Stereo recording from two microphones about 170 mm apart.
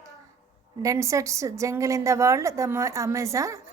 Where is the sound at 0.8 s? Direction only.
20° right (ahead or behind).